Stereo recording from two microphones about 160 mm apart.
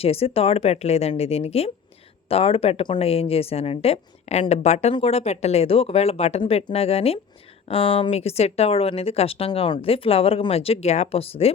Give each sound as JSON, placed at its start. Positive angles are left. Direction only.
{"t": 0.0, "sound": "speech", "side_deg": 40}